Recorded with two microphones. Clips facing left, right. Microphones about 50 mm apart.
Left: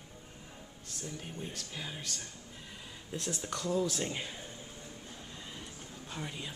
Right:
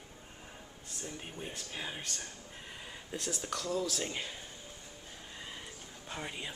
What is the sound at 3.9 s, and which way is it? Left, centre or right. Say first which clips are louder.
Speech: left 1 dB; centre.